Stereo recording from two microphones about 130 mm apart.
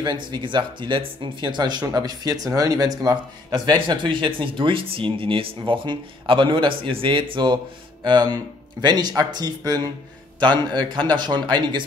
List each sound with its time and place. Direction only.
0.0 s speech: 35° right (ahead or behind)